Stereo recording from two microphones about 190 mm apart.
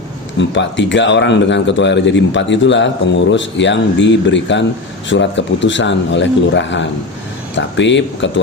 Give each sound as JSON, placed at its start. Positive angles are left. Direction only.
{"t": 0.3, "sound": "speech", "side_deg": 70}